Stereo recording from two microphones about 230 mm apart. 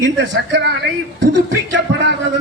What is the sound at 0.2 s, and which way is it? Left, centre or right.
Speech, right.